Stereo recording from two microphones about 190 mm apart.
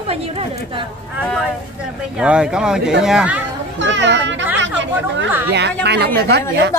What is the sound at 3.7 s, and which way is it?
Speech, 70° right (ahead or behind).